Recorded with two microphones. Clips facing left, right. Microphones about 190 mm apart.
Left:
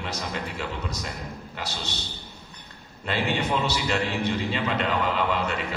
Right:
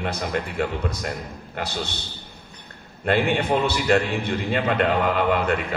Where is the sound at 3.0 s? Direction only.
55° right (ahead or behind).